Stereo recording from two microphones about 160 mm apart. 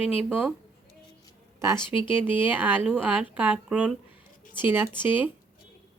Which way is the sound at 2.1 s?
10° right (ahead or behind).